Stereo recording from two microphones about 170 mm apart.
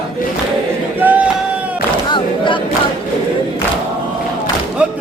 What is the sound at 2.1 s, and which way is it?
Music, 30° left (ahead or behind).